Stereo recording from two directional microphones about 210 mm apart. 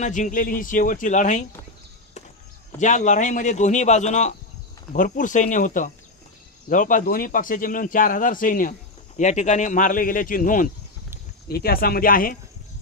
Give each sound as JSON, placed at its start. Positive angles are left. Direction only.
{"t": 0.0, "sound": "speech", "side_deg": 35}
{"t": 2.8, "sound": "speech", "side_deg": 35}